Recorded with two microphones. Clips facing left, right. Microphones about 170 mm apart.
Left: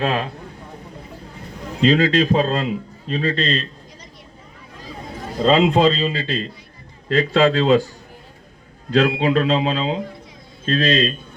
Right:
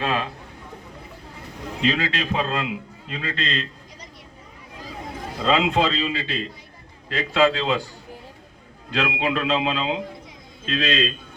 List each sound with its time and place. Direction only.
1.8 s a man's voice: 40° left (ahead or behind)
5.4 s a man's voice: 40° left (ahead or behind)
8.9 s a man's voice: 40° left (ahead or behind)